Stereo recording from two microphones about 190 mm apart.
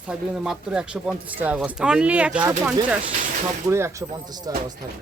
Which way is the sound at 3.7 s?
15° right (ahead or behind).